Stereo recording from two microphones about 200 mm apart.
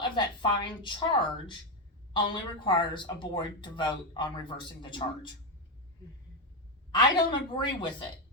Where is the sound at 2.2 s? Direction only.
25° left (ahead or behind).